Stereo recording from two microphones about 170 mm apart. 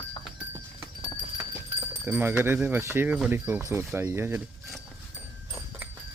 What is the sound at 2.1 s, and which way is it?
Speech, 10° right (ahead or behind).